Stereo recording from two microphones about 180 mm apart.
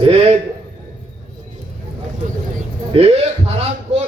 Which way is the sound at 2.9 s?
35° right (ahead or behind).